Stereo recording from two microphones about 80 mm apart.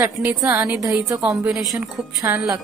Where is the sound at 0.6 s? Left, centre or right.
Right.